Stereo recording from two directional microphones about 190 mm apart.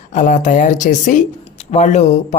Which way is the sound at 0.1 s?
40° left (ahead or behind).